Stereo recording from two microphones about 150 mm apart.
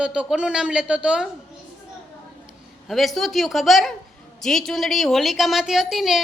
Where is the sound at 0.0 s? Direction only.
5° right (ahead or behind).